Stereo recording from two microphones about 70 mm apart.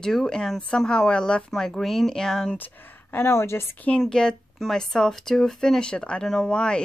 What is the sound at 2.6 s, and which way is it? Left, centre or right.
Speech, left.